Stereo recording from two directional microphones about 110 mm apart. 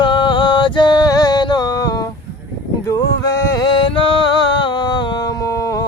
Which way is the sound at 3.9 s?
55° left (ahead or behind).